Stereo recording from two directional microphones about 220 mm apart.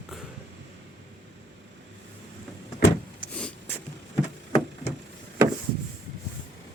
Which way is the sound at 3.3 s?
5° left (ahead or behind).